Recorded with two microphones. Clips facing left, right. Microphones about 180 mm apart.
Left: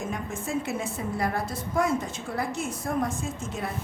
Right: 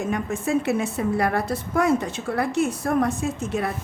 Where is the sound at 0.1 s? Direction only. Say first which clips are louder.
Right 7 dB; 70° right (ahead or behind).